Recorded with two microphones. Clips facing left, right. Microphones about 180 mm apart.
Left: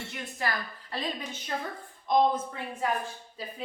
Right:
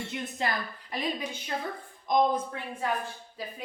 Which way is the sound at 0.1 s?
20° right (ahead or behind).